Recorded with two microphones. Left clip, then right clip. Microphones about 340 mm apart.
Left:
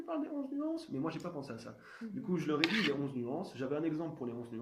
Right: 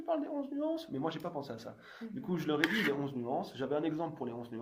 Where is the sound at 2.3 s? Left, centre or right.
Right.